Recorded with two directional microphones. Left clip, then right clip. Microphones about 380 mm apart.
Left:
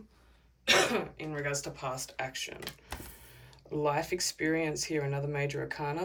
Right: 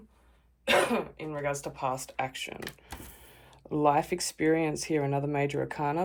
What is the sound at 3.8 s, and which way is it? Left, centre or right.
Speech, centre.